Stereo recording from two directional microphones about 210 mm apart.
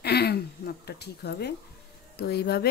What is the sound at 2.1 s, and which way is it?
Speech, 50° left (ahead or behind).